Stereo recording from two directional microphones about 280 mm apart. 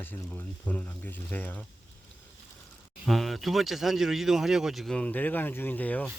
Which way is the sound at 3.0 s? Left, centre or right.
Centre.